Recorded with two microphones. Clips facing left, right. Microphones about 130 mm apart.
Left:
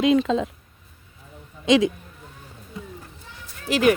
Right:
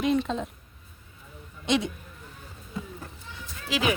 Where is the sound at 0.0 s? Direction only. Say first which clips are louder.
Left 6 dB; 90° left.